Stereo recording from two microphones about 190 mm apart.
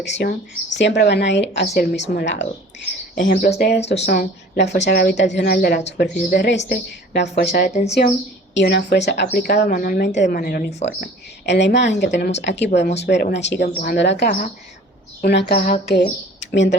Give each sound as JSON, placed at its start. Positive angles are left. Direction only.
{"t": 0.0, "sound": "speech", "side_deg": 65}
{"t": 1.7, "sound": "speech", "side_deg": 55}
{"t": 3.2, "sound": "speech", "side_deg": 45}
{"t": 7.7, "sound": "speech", "side_deg": 35}
{"t": 8.5, "sound": "a woman's voice", "side_deg": 60}
{"t": 11.0, "sound": "speech", "side_deg": 70}